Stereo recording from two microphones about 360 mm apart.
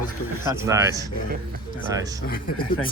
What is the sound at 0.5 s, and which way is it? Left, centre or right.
Speech, centre.